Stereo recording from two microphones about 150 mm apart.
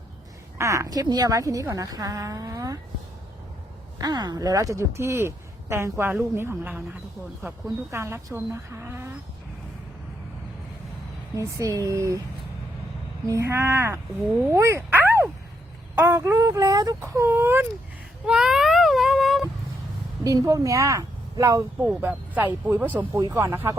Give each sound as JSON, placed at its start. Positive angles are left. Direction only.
{"t": 0.6, "sound": "speech", "side_deg": -20}
{"t": 3.9, "sound": "speech", "side_deg": -25}
{"t": 7.9, "sound": "speech", "side_deg": -15}
{"t": 11.3, "sound": "speech", "side_deg": -20}
{"t": 13.2, "sound": "speech", "side_deg": -20}
{"t": 14.5, "sound": "bow-wow", "side_deg": -20}
{"t": 16.0, "sound": "speech", "side_deg": -15}
{"t": 18.3, "sound": "a sound", "side_deg": -5}
{"t": 20.2, "sound": "speech", "side_deg": -20}
{"t": 21.8, "sound": "speech", "side_deg": -10}